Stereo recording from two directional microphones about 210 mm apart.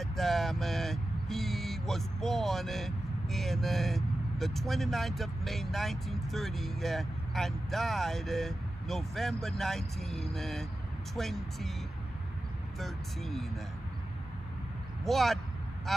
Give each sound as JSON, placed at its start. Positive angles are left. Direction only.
{"t": 0.0, "sound": "speech", "side_deg": 0}
{"t": 12.7, "sound": "speech", "side_deg": 0}
{"t": 15.0, "sound": "speech", "side_deg": 0}